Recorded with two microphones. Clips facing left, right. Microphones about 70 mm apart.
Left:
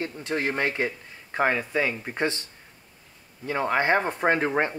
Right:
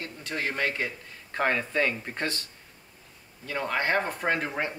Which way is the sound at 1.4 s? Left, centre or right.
Centre.